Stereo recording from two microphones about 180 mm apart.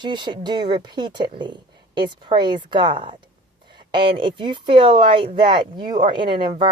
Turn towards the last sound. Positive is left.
turn(degrees=-25)  # may be behind; listen again after turning